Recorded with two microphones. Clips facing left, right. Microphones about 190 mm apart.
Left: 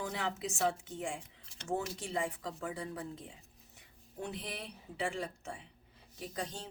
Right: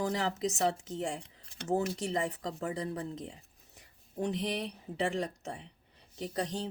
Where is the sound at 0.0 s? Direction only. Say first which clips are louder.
Right 6 dB; 35° right (ahead or behind).